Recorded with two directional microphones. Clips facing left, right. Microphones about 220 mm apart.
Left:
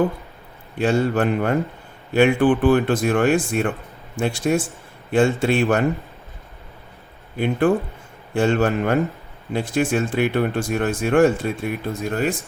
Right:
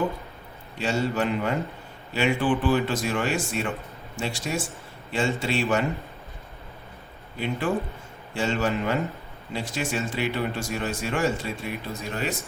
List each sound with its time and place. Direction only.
0.8 s a man's voice: 55° left (ahead or behind)
7.3 s a man's voice: 55° left (ahead or behind)